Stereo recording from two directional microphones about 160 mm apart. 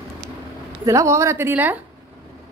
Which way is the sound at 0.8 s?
20° right (ahead or behind).